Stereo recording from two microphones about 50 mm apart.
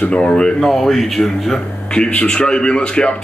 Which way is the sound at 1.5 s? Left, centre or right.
Centre.